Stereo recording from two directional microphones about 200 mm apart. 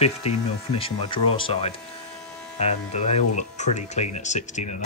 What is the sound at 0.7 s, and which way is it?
Speech, 25° left (ahead or behind).